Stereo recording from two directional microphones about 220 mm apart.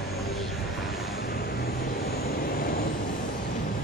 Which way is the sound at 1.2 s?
45° left (ahead or behind).